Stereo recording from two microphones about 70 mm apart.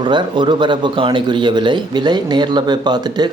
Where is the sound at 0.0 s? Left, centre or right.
Right.